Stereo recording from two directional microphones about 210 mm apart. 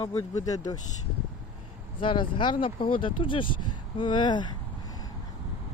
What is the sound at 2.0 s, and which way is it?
Speech, 25° left (ahead or behind).